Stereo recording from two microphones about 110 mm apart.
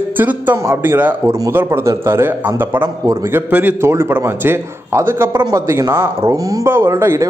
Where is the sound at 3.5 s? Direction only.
15° right (ahead or behind).